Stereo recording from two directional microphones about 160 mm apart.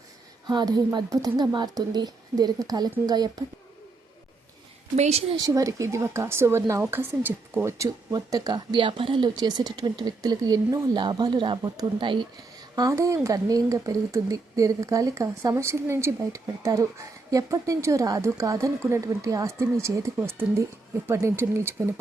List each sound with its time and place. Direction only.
0.4 s speech: 25° right (ahead or behind)
4.9 s a woman's voice: 45° right (ahead or behind)
5.4 s speech: 20° right (ahead or behind)